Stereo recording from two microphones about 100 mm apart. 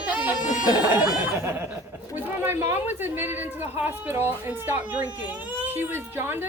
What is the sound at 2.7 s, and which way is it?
Speech, 20° right (ahead or behind).